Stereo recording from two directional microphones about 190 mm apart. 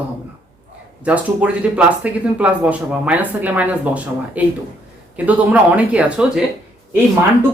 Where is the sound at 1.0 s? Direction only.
5° right (ahead or behind).